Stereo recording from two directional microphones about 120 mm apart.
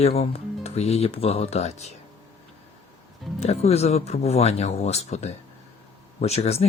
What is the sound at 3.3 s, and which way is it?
Speech, 60° left (ahead or behind).